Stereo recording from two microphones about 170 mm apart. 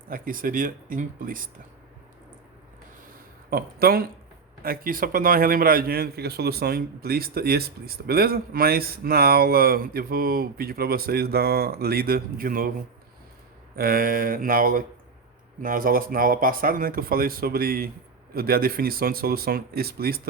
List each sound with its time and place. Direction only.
0.1 s speech: 55° right (ahead or behind)
3.5 s a man's voice: 65° right (ahead or behind)
13.7 s a man's voice: 60° right (ahead or behind)